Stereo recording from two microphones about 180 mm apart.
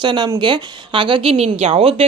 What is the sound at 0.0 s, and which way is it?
A woman's voice, 25° right (ahead or behind).